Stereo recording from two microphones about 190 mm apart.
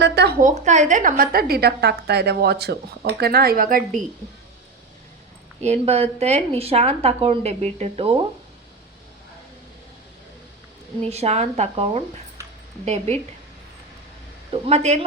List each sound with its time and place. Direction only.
0.0 s a woman's voice: 60° right (ahead or behind)
0.6 s a woman's voice: 40° right (ahead or behind)
5.6 s speech: 35° right (ahead or behind)
11.1 s speech: 35° right (ahead or behind)
14.5 s speech: 30° right (ahead or behind)